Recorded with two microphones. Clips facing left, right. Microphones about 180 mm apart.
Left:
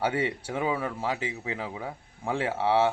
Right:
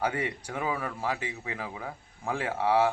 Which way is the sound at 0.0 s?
30° left (ahead or behind).